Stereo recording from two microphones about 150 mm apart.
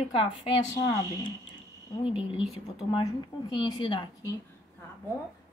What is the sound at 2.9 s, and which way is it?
Speech, 30° left (ahead or behind).